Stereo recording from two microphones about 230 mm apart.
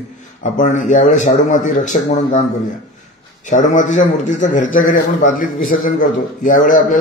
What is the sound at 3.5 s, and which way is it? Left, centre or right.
Speech, left.